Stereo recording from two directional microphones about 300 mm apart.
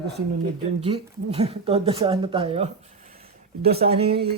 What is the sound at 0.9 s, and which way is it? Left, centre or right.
A woman's voice, centre.